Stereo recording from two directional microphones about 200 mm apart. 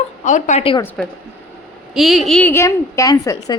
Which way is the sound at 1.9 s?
Centre (ahead or behind).